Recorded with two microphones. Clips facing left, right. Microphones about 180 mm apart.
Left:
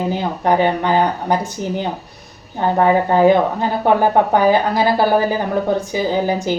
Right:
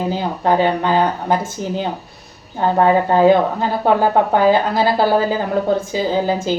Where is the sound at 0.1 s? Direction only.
20° left (ahead or behind).